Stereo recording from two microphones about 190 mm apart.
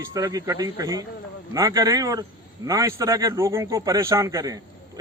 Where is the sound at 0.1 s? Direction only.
20° right (ahead or behind).